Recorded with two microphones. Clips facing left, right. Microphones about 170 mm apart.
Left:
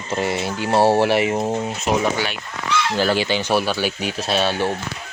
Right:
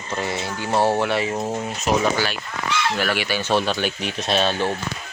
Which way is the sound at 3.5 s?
5° left (ahead or behind).